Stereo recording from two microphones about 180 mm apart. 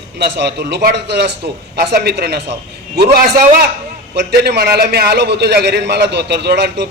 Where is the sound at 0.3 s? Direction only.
70° right (ahead or behind).